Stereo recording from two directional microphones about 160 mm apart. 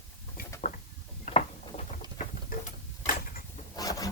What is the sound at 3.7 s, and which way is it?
Rub, 20° left (ahead or behind).